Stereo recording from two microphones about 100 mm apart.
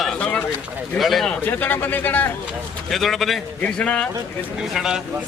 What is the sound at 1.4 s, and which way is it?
Speech, 20° left (ahead or behind).